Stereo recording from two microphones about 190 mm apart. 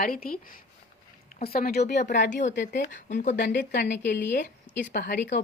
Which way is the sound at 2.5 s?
60° left (ahead or behind).